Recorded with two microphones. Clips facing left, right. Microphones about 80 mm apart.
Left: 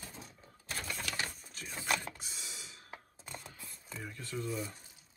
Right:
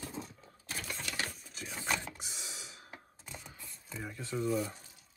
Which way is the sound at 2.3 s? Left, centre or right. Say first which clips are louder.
Right 2 dB; right.